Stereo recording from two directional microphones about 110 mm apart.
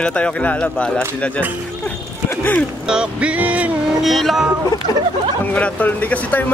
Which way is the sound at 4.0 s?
Centre (ahead or behind).